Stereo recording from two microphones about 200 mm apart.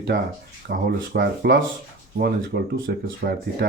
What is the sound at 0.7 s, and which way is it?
Speech, 55° right (ahead or behind).